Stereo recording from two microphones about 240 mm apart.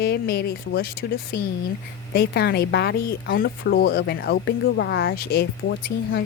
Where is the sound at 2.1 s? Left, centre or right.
Left.